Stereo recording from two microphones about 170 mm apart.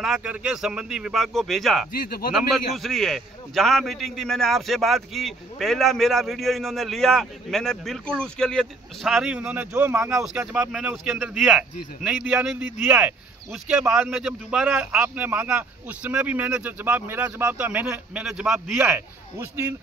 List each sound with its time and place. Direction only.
0.0 s a man's voice: 5° right (ahead or behind)
1.9 s speech: 60° left (ahead or behind)
2.3 s a man's voice: centre (ahead or behind)